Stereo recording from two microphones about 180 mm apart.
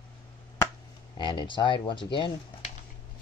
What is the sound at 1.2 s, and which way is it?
Speech, 25° left (ahead or behind).